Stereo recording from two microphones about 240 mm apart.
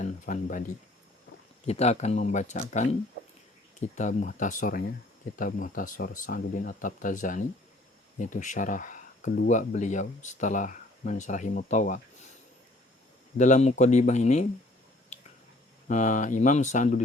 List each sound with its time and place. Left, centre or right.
0.0 s speech: left
1.6 s speech: left
13.3 s speech: left
15.9 s speech: left